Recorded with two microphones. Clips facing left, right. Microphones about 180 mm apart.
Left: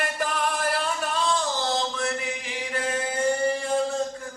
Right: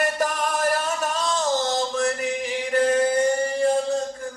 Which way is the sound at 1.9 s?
40° right (ahead or behind).